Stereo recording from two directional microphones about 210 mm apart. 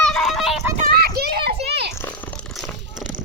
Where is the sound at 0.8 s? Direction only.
45° right (ahead or behind).